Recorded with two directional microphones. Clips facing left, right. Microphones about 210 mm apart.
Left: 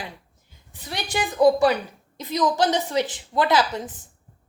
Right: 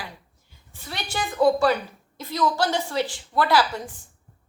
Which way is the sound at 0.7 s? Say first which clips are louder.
Left 3 dB; 20° left (ahead or behind).